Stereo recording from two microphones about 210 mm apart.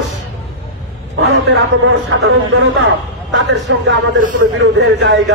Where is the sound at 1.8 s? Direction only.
60° right (ahead or behind).